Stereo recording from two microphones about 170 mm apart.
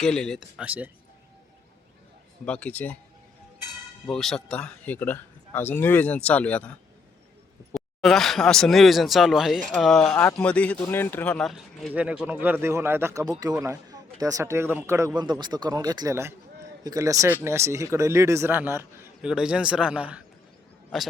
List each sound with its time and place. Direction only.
0.0 s speech: 5° left (ahead or behind)
2.4 s speech: 5° left (ahead or behind)
4.0 s speech: centre (ahead or behind)
7.7 s a man's voice: centre (ahead or behind)